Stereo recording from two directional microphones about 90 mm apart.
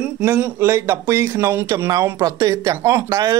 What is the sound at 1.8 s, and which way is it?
Speech, 40° right (ahead or behind).